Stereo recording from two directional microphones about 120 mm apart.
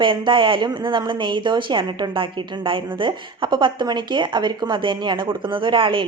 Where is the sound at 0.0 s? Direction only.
45° right (ahead or behind).